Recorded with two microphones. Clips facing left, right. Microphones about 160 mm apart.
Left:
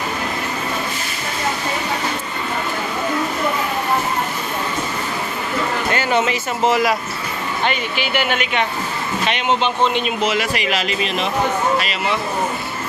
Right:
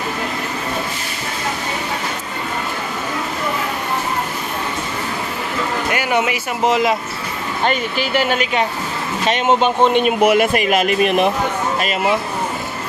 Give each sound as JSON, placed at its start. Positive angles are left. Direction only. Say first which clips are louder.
{"t": 5.9, "sound": "speech", "louder": "even", "side_deg": -15}
{"t": 7.6, "sound": "a man's voice", "louder": "right 4 dB", "side_deg": -40}